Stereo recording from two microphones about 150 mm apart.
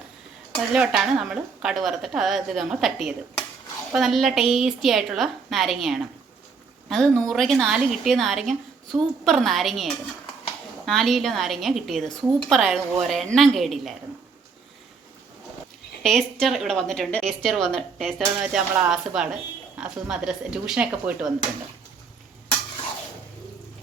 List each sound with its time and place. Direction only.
0.7 s a woman's voice: 5° right (ahead or behind)
16.0 s a woman's voice: centre (ahead or behind)